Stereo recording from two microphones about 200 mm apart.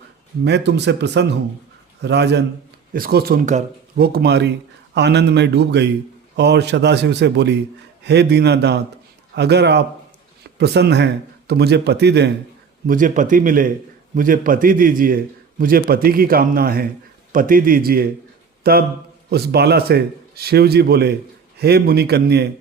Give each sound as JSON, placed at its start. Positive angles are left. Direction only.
{"t": 0.4, "sound": "a man's voice", "side_deg": -60}
{"t": 12.9, "sound": "a man's voice", "side_deg": -40}